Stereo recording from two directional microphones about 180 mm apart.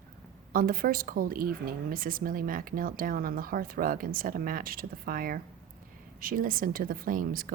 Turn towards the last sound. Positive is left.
turn(degrees=-50)  # may be behind; listen again after turning